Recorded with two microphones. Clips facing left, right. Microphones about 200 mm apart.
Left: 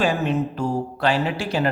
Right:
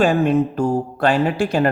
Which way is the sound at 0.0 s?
50° right (ahead or behind).